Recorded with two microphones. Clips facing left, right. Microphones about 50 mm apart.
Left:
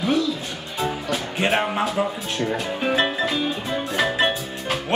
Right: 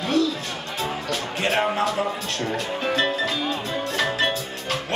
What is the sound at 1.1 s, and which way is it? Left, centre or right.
Music, centre.